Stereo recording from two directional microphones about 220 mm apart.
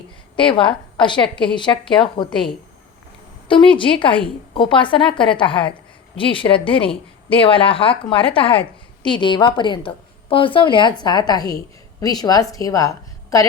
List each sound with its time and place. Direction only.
0.3 s a woman's voice: 20° left (ahead or behind)
3.5 s a woman's voice: 25° left (ahead or behind)